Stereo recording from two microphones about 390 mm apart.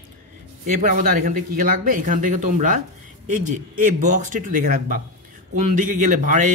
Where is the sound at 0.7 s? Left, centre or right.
Centre.